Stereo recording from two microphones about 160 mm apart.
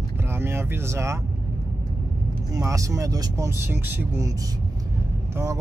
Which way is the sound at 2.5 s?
20° right (ahead or behind).